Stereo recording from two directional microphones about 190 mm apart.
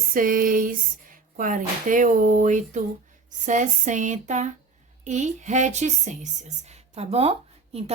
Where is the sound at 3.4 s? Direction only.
40° right (ahead or behind).